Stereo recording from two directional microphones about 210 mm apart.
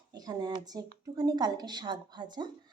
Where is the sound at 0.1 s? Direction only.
20° right (ahead or behind).